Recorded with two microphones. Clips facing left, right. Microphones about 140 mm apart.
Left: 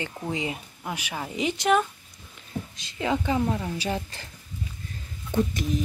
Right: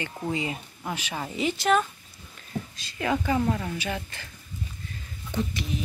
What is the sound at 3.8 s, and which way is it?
Speech, 35° left (ahead or behind).